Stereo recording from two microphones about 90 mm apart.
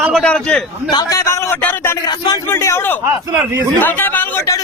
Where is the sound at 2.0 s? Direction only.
50° left (ahead or behind).